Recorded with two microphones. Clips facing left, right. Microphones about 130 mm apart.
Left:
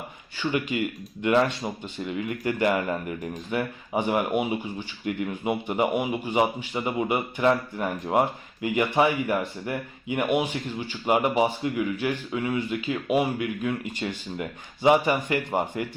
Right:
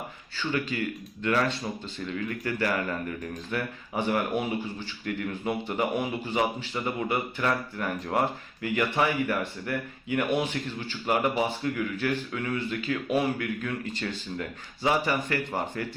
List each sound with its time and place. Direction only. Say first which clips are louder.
0.3 s speech: left 3 dB; 15° left (ahead or behind)